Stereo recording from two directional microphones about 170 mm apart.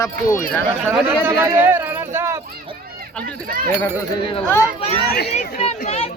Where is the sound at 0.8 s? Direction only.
10° right (ahead or behind).